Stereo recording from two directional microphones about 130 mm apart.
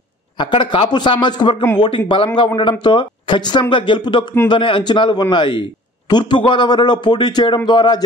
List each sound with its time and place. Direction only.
0.4 s a man's voice: 35° left (ahead or behind)